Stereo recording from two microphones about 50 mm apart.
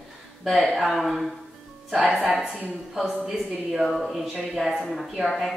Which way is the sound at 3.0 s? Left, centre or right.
Centre.